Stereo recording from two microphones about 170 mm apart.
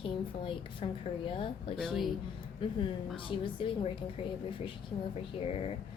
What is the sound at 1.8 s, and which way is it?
Speech, centre (ahead or behind).